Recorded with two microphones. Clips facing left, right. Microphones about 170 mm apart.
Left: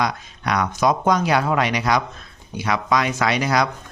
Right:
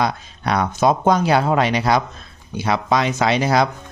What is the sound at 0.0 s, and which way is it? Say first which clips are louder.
Speech: right 2 dB; 30° right (ahead or behind).